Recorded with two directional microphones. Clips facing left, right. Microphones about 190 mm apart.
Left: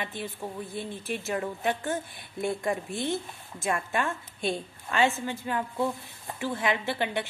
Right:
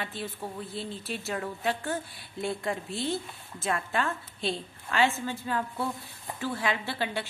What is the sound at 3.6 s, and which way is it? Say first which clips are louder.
A woman's voice: left 1 dB; 15° left (ahead or behind).